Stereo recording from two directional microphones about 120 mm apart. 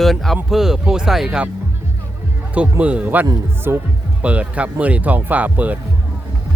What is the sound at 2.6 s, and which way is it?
Speech, 10° right (ahead or behind).